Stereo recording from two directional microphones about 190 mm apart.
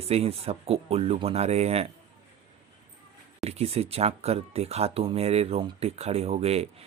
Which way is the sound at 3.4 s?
35° right (ahead or behind).